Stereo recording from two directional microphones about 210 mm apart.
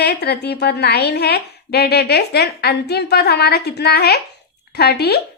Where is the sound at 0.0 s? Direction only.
50° left (ahead or behind).